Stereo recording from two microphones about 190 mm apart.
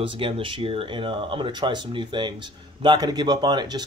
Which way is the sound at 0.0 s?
25° right (ahead or behind).